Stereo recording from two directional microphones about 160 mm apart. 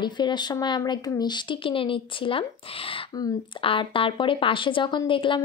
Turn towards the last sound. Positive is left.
turn(degrees=30)  # may be behind; listen again after turning